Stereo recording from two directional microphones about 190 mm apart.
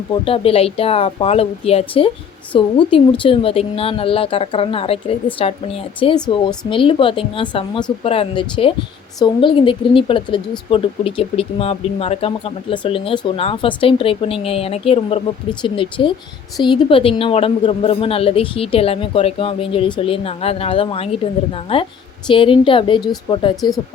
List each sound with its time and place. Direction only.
0.1 s a woman's voice: 30° left (ahead or behind)